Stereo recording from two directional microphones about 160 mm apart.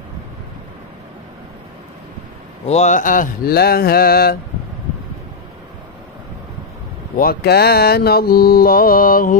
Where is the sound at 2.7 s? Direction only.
50° left (ahead or behind); by 4.4 s 70° left (ahead or behind).